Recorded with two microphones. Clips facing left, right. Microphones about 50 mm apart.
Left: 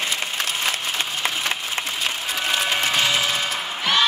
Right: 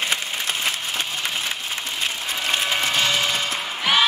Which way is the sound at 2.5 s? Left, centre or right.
Centre.